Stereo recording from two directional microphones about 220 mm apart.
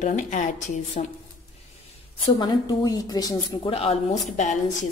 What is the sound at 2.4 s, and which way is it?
A woman's voice, 15° left (ahead or behind).